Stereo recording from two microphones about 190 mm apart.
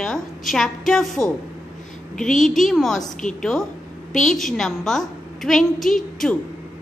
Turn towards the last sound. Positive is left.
turn(degrees=5)  # may be behind; listen again after turning